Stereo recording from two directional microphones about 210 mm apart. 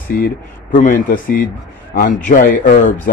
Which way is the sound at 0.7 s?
40° left (ahead or behind).